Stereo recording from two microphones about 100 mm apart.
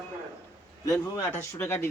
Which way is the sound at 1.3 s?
25° left (ahead or behind).